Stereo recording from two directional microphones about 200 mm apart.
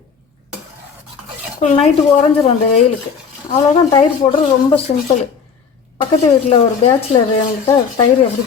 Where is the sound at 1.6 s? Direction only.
40° left (ahead or behind).